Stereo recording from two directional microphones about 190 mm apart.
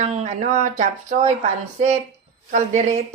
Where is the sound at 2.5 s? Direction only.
40° right (ahead or behind).